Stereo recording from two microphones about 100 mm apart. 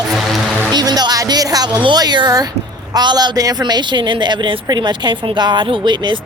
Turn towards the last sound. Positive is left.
turn(degrees=-50)  # may be behind; listen again after turning